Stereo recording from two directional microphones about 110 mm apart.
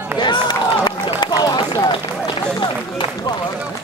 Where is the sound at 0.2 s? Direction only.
40° left (ahead or behind).